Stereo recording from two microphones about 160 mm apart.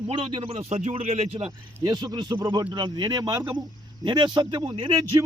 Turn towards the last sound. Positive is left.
turn(degrees=-25)  # may be behind; listen again after turning